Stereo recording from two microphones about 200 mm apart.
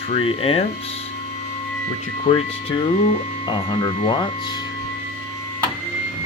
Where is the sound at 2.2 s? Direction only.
25° left (ahead or behind).